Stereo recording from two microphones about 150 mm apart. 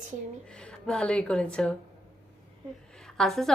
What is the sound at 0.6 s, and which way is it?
A woman's voice, 5° left (ahead or behind).